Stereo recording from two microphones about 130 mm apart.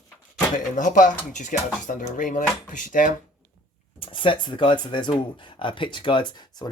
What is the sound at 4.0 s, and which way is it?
Speech, 40° left (ahead or behind).